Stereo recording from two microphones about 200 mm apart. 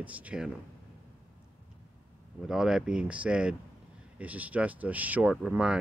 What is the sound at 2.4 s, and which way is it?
Speech, 5° right (ahead or behind).